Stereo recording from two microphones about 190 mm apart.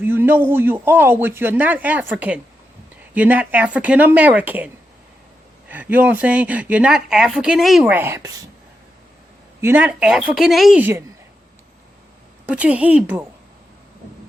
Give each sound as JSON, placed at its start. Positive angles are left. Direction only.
{"t": 0.0, "sound": "speech", "side_deg": -10}
{"t": 9.6, "sound": "speech", "side_deg": -10}
{"t": 12.5, "sound": "speech", "side_deg": -5}